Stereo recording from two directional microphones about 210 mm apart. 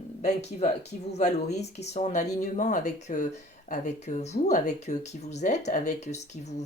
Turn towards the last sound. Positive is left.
turn(degrees=30)  # may be behind; listen again after turning